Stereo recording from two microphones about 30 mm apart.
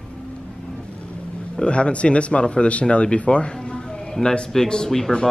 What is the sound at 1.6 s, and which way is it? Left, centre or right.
Speech, left.